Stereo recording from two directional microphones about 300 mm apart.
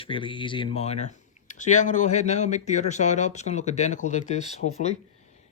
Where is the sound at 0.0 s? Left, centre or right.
Centre.